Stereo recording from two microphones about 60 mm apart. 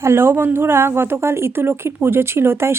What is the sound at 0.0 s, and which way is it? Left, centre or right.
Speech, right.